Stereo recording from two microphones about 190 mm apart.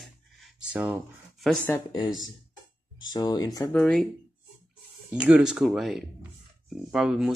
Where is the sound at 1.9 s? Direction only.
25° left (ahead or behind).